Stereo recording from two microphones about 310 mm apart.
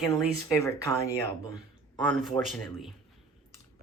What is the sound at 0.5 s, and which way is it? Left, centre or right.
A man's voice, centre.